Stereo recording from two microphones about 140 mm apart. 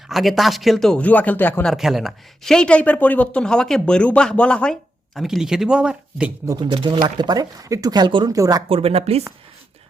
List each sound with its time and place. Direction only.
0.1 s speech: centre (ahead or behind)
1.7 s speech: centre (ahead or behind)
6.5 s speech: 30° right (ahead or behind)
8.7 s speech: 45° right (ahead or behind)